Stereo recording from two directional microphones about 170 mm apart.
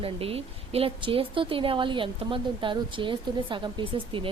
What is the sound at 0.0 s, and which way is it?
A woman's voice, 35° right (ahead or behind).